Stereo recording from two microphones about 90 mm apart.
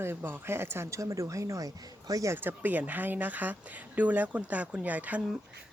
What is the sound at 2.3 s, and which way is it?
Speech, 20° right (ahead or behind).